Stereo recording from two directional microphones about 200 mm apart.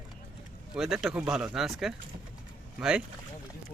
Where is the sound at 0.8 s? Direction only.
Centre (ahead or behind).